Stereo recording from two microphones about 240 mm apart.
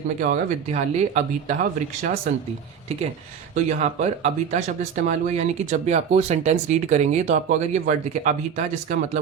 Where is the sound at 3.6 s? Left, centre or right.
Right.